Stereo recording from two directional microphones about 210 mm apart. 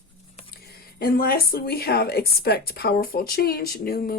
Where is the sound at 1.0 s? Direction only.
45° left (ahead or behind).